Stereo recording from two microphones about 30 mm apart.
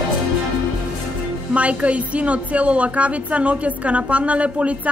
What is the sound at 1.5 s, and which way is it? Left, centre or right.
A woman's voice, right.